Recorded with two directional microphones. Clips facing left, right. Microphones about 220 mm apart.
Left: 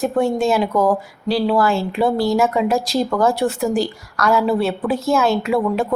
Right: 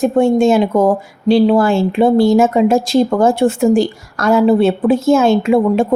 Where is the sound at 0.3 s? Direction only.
20° right (ahead or behind).